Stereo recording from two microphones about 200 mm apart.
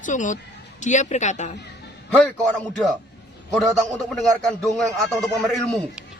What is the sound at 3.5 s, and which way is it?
A man's voice, centre (ahead or behind).